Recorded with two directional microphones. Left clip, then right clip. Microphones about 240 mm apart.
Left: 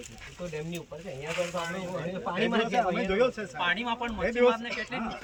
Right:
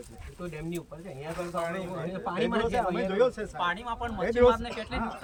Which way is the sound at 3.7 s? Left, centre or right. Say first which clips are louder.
Left 3 dB; right.